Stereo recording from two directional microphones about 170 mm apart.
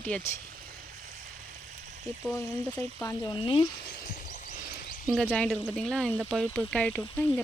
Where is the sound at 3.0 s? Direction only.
25° left (ahead or behind).